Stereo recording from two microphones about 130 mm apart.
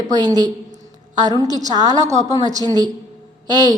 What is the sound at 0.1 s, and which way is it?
A woman's voice, 30° right (ahead or behind).